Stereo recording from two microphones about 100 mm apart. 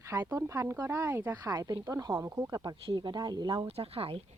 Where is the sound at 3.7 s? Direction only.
80° right.